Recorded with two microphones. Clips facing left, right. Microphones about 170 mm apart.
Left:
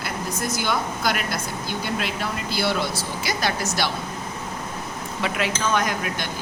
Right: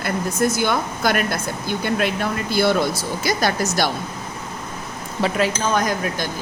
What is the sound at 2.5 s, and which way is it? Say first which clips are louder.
Speech: right 7 dB; 50° right (ahead or behind).